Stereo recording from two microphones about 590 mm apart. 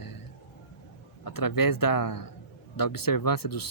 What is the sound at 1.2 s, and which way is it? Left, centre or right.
Speech, left.